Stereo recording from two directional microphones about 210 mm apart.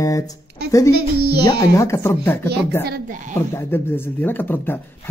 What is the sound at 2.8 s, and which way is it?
Speech, 45° right (ahead or behind).